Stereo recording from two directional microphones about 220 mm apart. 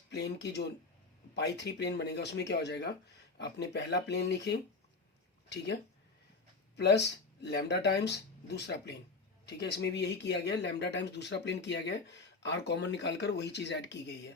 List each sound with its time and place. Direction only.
0.1 s speech: 50° left (ahead or behind)
6.7 s speech: 50° left (ahead or behind)